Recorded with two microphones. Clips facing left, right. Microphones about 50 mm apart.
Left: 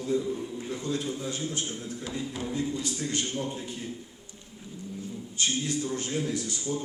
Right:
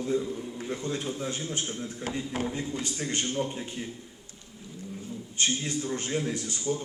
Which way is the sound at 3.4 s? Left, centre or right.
Right.